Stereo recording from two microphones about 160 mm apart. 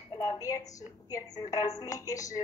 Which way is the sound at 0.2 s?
20° left (ahead or behind).